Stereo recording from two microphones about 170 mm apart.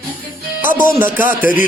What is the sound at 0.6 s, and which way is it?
Speech, 10° right (ahead or behind).